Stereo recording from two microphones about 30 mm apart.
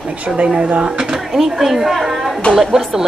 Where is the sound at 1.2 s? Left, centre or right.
Centre.